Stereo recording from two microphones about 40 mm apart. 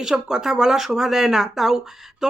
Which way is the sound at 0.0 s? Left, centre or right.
Centre.